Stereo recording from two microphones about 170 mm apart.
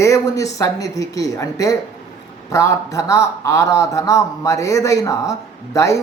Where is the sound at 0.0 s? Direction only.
20° left (ahead or behind).